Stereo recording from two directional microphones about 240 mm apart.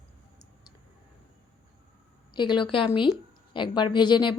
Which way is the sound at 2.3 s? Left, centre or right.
Centre.